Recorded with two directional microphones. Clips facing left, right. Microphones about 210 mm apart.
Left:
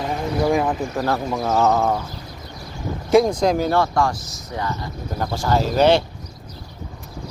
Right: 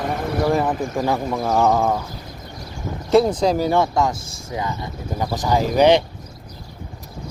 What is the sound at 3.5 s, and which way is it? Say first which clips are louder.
Speech: right 1 dB; 10° right (ahead or behind).